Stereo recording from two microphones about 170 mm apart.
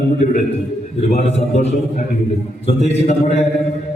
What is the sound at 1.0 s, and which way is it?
A man's voice, 40° left (ahead or behind).